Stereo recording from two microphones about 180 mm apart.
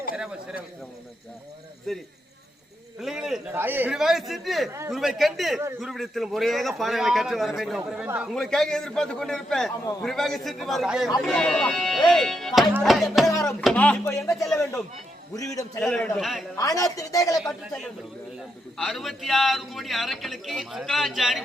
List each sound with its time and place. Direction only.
1.9 s a man's voice: centre (ahead or behind)
8.3 s a man's voice: 5° left (ahead or behind)
14.3 s a man's voice: centre (ahead or behind)
15.4 s speech: 20° left (ahead or behind)
15.8 s a man's voice: 5° left (ahead or behind)
16.6 s speech: 20° left (ahead or behind)
18.3 s a man's voice: centre (ahead or behind)